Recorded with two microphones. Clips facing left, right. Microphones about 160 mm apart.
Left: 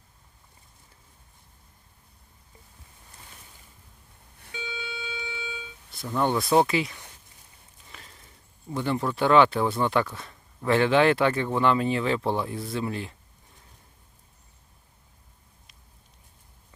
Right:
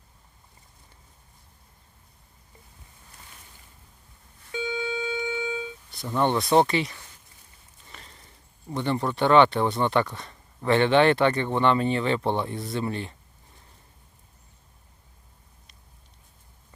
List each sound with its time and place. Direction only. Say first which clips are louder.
4.6 s music: right 8 dB; 45° right (ahead or behind)
5.9 s speech: right 1 dB; centre (ahead or behind)
7.9 s a sound: right 1 dB; centre (ahead or behind)
8.7 s speech: right 1 dB; centre (ahead or behind)